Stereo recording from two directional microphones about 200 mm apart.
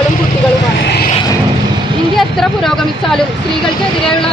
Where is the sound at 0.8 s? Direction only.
55° left (ahead or behind).